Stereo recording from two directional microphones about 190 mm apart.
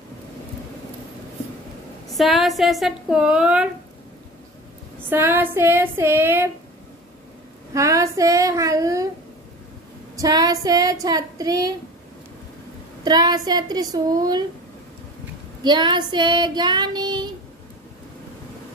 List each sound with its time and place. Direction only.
2.1 s speech: centre (ahead or behind)
5.1 s child singing: 10° right (ahead or behind)
7.7 s child singing: 15° right (ahead or behind)
10.1 s child singing: 20° right (ahead or behind)
13.0 s child singing: 20° right (ahead or behind)
15.6 s child singing: 25° right (ahead or behind)